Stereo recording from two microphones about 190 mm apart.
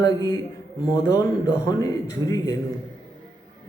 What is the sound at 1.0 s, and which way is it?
A man's voice, 15° left (ahead or behind).